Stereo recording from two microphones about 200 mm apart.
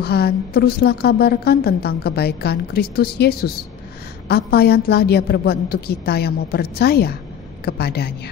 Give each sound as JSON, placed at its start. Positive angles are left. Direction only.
{"t": 0.0, "sound": "a woman's voice", "side_deg": 55}